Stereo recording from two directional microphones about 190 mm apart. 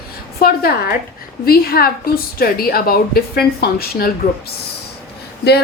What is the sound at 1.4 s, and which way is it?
A woman's voice, 55° left (ahead or behind).